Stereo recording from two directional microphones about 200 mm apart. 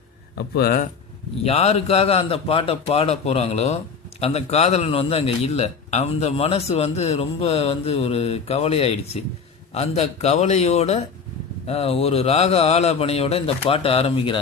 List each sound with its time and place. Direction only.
0.3 s speech: 50° left (ahead or behind)
1.5 s a man's voice: 30° left (ahead or behind)